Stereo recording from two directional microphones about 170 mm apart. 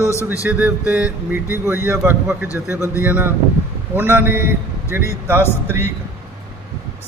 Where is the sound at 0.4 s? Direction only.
5° right (ahead or behind).